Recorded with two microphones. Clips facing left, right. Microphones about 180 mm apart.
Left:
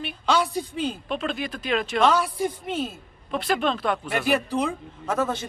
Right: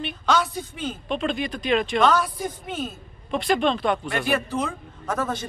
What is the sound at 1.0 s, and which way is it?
Speech, 5° left (ahead or behind).